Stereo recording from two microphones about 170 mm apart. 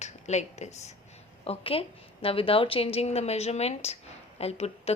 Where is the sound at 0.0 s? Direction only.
40° left (ahead or behind).